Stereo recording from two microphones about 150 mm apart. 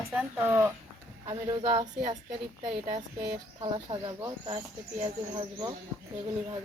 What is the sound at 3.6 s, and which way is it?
Speech, 35° right (ahead or behind).